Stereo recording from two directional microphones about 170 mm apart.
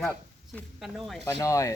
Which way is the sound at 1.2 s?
20° left (ahead or behind).